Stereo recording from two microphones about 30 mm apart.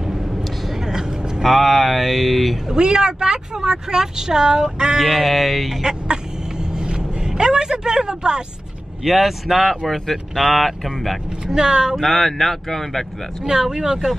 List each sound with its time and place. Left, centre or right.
1.4 s speech: centre
2.7 s speech: right
4.9 s speech: centre
6.9 s a sound: right
9.0 s speech: centre
9.6 s speech: centre
11.4 s speech: right
11.9 s speech: centre
13.5 s speech: right